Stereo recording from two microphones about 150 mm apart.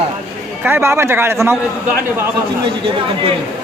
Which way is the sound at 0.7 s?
15° right (ahead or behind).